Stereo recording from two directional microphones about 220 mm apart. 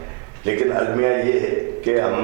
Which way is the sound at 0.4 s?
15° right (ahead or behind).